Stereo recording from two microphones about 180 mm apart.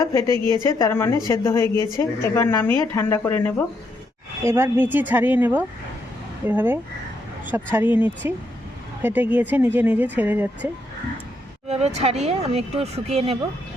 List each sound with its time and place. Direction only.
0.0 s a woman's voice: 15° left (ahead or behind)
4.4 s speech: 15° right (ahead or behind)
11.7 s speech: 35° right (ahead or behind)